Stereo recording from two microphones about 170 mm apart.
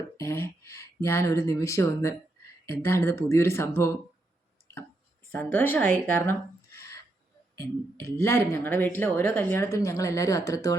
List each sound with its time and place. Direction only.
0.2 s speech: 15° left (ahead or behind)
5.3 s speech: 10° left (ahead or behind)